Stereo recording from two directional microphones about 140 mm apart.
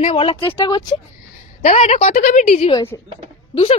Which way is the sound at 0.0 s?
45° left (ahead or behind).